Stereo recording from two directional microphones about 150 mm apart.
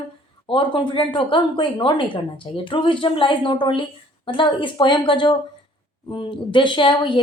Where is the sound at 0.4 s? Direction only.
35° left (ahead or behind).